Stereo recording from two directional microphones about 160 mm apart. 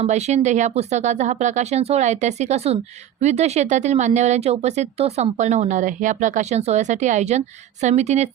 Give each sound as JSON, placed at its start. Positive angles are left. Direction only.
{"t": 0.0, "sound": "speech", "side_deg": -45}